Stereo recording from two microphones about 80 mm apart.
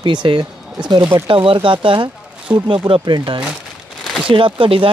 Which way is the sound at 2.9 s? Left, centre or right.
Right.